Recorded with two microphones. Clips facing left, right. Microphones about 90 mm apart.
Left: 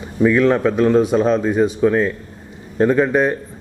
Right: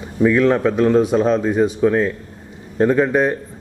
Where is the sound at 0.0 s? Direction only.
25° left (ahead or behind).